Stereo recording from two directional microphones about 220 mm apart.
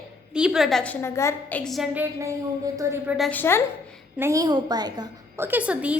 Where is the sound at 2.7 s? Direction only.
10° right (ahead or behind).